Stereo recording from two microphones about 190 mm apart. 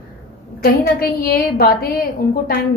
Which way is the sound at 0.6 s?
50° left (ahead or behind).